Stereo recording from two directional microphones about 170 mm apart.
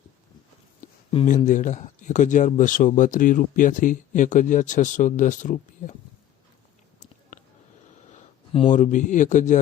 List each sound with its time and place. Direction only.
1.1 s speech: 40° left (ahead or behind)
8.1 s a sound: 35° left (ahead or behind)
8.7 s speech: 45° left (ahead or behind)